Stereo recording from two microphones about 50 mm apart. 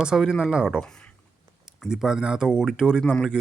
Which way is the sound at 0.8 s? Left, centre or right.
Centre.